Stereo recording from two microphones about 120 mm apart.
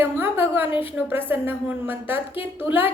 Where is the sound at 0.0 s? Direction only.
15° right (ahead or behind).